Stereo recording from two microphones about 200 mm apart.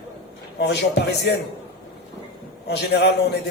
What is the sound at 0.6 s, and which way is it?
Speech, 55° left (ahead or behind).